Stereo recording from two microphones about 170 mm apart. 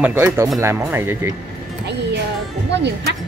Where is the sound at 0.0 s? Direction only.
15° right (ahead or behind).